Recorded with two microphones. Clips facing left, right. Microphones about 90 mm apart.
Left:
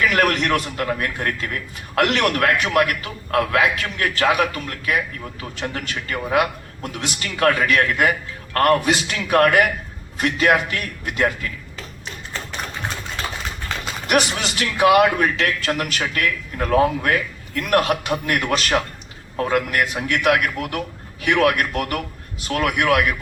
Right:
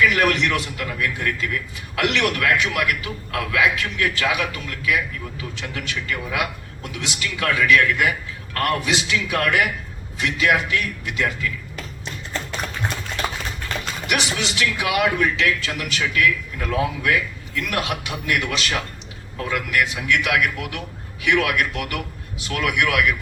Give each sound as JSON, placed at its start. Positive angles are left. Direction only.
{"t": 0.0, "sound": "a man's voice", "side_deg": 45}
{"t": 14.1, "sound": "a man's voice", "side_deg": 45}